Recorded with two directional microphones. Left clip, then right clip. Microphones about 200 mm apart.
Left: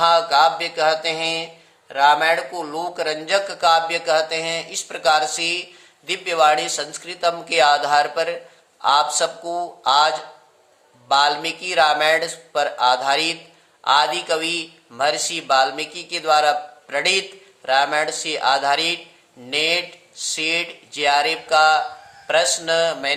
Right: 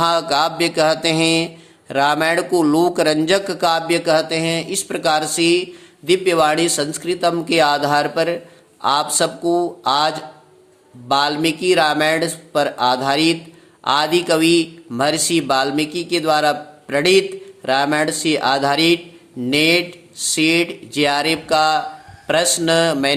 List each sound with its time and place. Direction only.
0.0 s mantra: 40° right (ahead or behind)
1.9 s a man's voice: 40° right (ahead or behind)